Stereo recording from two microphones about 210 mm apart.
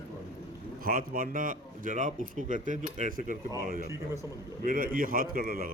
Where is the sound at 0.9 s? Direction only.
45° right (ahead or behind).